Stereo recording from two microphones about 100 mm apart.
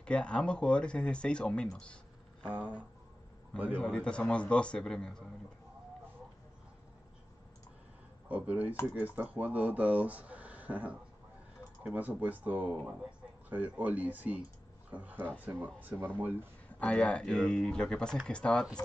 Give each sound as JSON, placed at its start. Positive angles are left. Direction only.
{"t": 0.0, "sound": "speech", "side_deg": 10}
{"t": 2.4, "sound": "speech", "side_deg": -15}
{"t": 3.8, "sound": "speech", "side_deg": 10}
{"t": 8.3, "sound": "speech", "side_deg": -15}
{"t": 16.8, "sound": "speech", "side_deg": 10}